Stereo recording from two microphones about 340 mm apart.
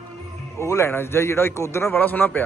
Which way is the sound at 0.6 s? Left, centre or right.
Centre.